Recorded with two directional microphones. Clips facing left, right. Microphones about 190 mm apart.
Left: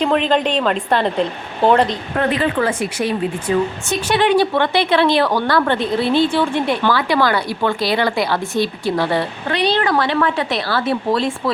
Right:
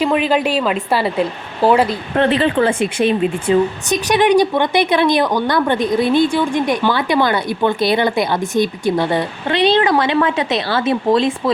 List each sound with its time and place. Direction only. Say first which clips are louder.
0.0 s a woman's voice: right 1 dB; 5° right (ahead or behind)
2.1 s speech: right 4 dB; 25° right (ahead or behind)